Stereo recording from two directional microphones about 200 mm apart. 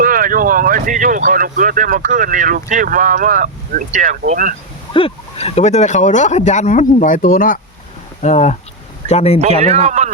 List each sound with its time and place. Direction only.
0.0 s speech: 45° right (ahead or behind)
4.9 s speech: 30° left (ahead or behind); by 7.6 s 45° left (ahead or behind)
8.2 s speech: 35° left (ahead or behind)
9.6 s speech: 35° right (ahead or behind)